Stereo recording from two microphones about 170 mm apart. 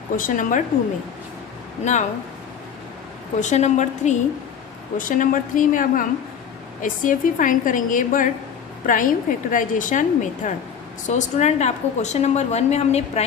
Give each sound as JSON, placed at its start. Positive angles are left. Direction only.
{"t": 0.2, "sound": "a woman's voice", "side_deg": 50}
{"t": 1.8, "sound": "a woman's voice", "side_deg": 45}
{"t": 3.4, "sound": "a woman's voice", "side_deg": 45}